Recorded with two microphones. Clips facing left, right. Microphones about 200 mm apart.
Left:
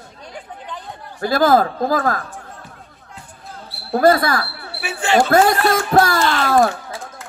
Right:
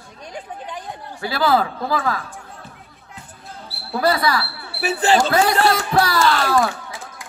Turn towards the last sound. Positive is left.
turn(degrees=50)  # may be behind; listen again after turning